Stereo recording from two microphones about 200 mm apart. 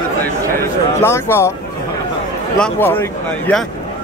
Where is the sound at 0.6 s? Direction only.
10° left (ahead or behind).